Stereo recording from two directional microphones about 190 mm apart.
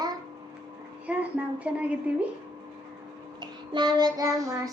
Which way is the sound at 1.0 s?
5° right (ahead or behind).